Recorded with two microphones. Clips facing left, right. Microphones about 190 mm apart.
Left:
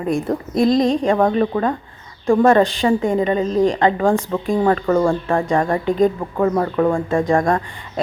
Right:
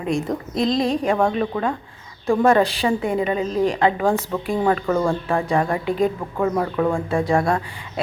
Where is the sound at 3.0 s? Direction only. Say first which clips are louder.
Left 4 dB; 35° left (ahead or behind).